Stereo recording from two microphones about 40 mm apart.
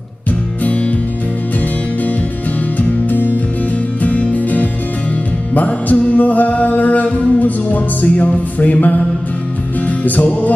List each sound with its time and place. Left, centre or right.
2.8 s music: left